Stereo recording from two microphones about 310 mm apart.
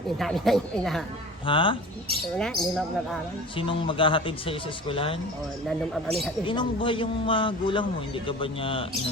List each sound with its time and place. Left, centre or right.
0.2 s speech: centre
1.5 s speech: centre
2.4 s speech: centre
3.6 s speech: centre
5.6 s speech: centre
6.4 s speech: centre